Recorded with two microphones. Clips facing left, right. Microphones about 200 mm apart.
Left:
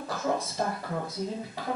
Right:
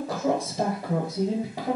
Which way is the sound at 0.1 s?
15° right (ahead or behind).